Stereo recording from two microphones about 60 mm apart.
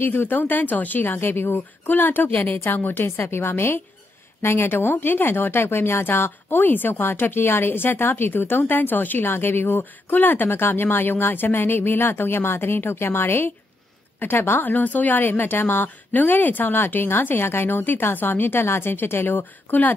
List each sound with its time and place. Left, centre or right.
0.0 s speech: left
14.7 s speech: left